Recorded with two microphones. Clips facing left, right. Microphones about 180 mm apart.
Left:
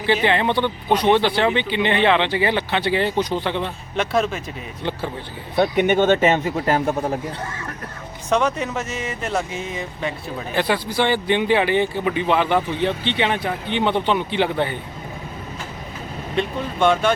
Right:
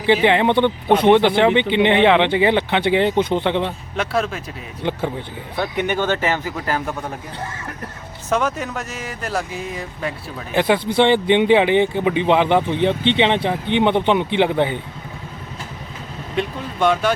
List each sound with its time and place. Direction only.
0.0 s a man's voice: 15° right (ahead or behind)
3.9 s speech: centre (ahead or behind)
5.5 s speech: 20° left (ahead or behind)
8.3 s speech: centre (ahead or behind)
10.5 s a man's voice: 20° right (ahead or behind)
16.3 s speech: 5° right (ahead or behind)